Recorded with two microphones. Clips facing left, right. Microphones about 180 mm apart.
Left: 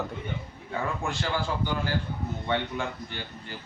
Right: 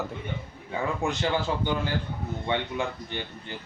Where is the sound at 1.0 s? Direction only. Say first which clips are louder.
Right 3 dB; 20° right (ahead or behind).